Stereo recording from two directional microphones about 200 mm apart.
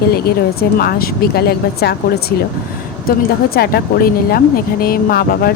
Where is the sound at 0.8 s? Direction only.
50° left (ahead or behind).